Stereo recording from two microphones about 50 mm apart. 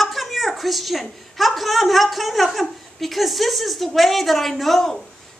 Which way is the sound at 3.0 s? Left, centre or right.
Centre.